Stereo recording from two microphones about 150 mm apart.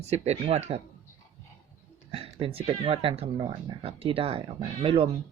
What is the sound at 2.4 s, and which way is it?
Speech, 40° right (ahead or behind).